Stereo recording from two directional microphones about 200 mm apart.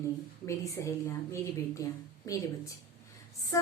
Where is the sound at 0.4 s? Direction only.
15° left (ahead or behind).